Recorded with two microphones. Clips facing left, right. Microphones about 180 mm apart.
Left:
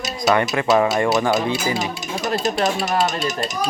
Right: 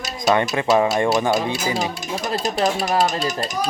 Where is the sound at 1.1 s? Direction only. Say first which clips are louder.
Even; 10° right (ahead or behind).